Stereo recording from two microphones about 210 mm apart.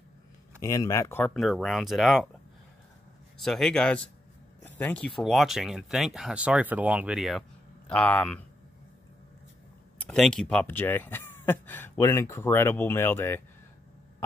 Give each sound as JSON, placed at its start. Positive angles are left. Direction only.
{"t": 0.6, "sound": "speech", "side_deg": 15}
{"t": 1.3, "sound": "speech", "side_deg": 0}
{"t": 3.4, "sound": "speech", "side_deg": 5}
{"t": 9.9, "sound": "speech", "side_deg": 5}